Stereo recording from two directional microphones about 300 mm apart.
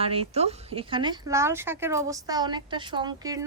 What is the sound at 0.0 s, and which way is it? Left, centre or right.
A woman's voice, centre.